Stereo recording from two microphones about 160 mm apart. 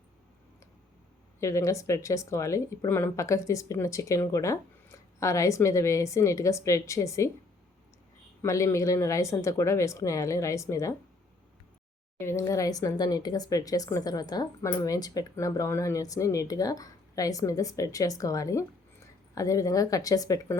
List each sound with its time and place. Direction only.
1.4 s speech: 20° left (ahead or behind)
8.4 s speech: 20° left (ahead or behind)
12.2 s speech: 15° left (ahead or behind)